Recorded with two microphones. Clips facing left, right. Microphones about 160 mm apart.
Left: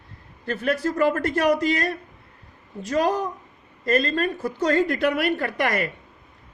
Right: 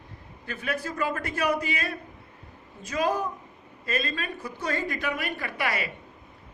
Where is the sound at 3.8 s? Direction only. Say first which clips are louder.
Left 9 dB; 50° left (ahead or behind).